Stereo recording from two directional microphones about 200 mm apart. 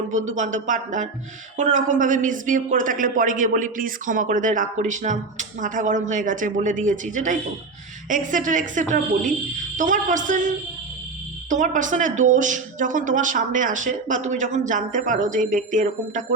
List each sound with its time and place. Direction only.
0.1 s speech: 40° right (ahead or behind)